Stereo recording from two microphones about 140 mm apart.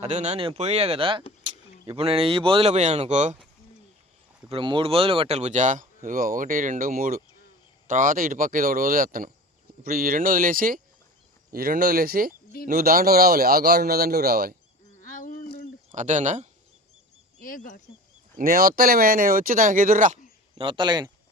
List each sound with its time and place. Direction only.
0.0 s speech: 55° right (ahead or behind)
4.4 s speech: 40° right (ahead or behind); by 9.3 s 80° right
9.8 s a man's voice: 90° right
15.0 s a sound: 70° left (ahead or behind)
15.9 s speech: 60° right (ahead or behind)
17.4 s speech: 70° left (ahead or behind)
18.3 s a man's voice: 90° right; by 20.1 s 70° right (ahead or behind)
20.6 s speech: 35° right (ahead or behind)